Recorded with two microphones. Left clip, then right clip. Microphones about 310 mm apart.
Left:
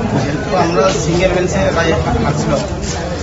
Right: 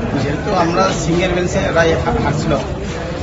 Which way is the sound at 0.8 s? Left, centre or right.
Centre.